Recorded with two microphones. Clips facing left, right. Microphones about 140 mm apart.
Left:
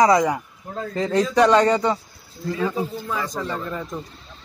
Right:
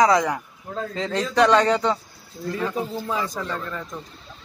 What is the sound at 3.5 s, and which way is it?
Speech, 10° left (ahead or behind).